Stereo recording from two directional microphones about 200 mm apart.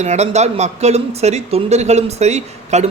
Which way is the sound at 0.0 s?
35° right (ahead or behind).